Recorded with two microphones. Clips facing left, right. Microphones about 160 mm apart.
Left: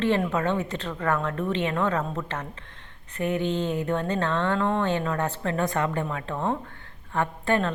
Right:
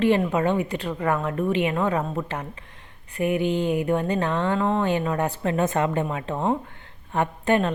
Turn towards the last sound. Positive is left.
turn(degrees=-15)  # may be behind; listen again after turning